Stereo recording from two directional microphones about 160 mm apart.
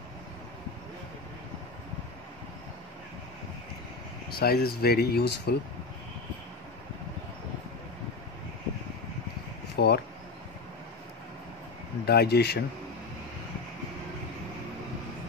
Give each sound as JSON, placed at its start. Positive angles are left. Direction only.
{"t": 4.4, "sound": "speech", "side_deg": 75}
{"t": 9.8, "sound": "speech", "side_deg": 90}
{"t": 12.1, "sound": "speech", "side_deg": 90}